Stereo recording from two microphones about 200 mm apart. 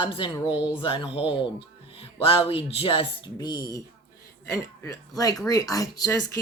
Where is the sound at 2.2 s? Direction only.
30° left (ahead or behind).